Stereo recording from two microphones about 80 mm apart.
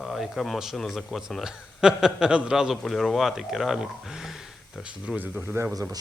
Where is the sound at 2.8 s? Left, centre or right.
Centre.